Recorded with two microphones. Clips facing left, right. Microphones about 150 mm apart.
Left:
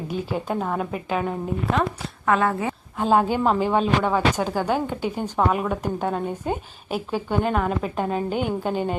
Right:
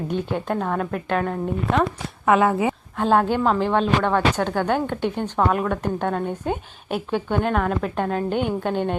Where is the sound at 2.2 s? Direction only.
15° right (ahead or behind).